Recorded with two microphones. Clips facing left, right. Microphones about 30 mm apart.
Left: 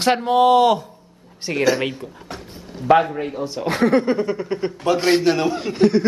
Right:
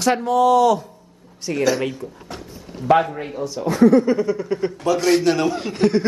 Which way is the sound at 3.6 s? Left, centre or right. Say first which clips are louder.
Right 3 dB; left.